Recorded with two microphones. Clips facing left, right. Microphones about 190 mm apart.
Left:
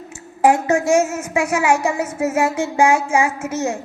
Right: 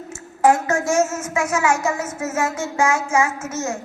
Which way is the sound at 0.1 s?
30° left (ahead or behind).